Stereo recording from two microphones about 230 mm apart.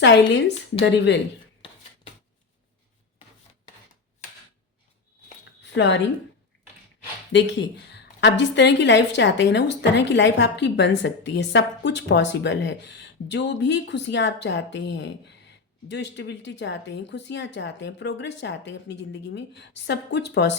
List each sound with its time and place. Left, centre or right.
0.0 s a woman's voice: left
5.6 s a woman's voice: left
7.9 s a woman's voice: left